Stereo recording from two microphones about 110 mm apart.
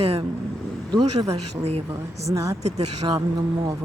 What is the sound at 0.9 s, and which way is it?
Speech, 40° right (ahead or behind).